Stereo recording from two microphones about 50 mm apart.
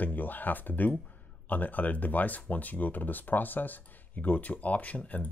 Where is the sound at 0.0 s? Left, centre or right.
Left.